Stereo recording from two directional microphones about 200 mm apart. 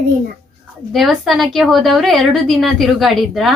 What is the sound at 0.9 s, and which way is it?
A woman's voice, centre (ahead or behind).